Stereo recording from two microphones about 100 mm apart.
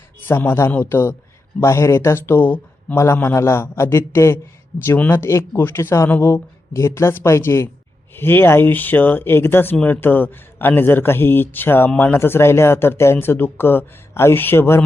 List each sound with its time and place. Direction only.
0.3 s speech: 20° left (ahead or behind)